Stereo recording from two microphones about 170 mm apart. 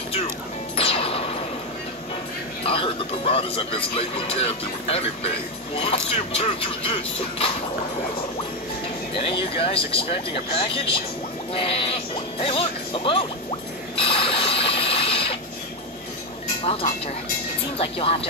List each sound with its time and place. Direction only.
0.7 s music: 35° left (ahead or behind)
2.6 s speech: 35° left (ahead or behind)
9.2 s speech: 35° left (ahead or behind)
11.5 s music: 35° left (ahead or behind)
16.6 s speech: 35° left (ahead or behind)